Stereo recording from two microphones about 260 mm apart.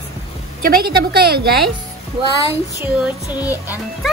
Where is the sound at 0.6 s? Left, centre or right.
Right.